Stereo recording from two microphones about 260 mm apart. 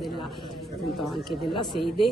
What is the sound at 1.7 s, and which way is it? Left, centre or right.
Speech, centre.